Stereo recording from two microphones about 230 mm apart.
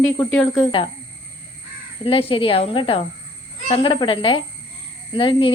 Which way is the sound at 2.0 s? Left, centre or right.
Left.